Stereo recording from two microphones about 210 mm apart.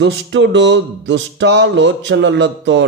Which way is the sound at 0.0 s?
60° right (ahead or behind).